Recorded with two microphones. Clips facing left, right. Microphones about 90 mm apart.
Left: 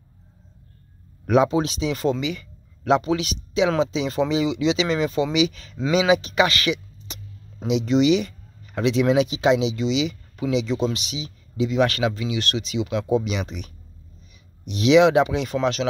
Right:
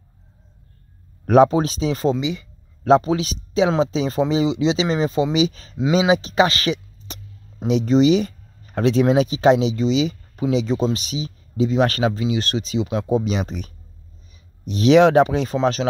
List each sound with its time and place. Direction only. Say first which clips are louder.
1.2 s speech: right 5 dB; 40° right (ahead or behind); by 2.4 s 25° right (ahead or behind)
2.8 s speech: right 4 dB; 35° right (ahead or behind)
14.7 s speech: right 2 dB; 40° right (ahead or behind)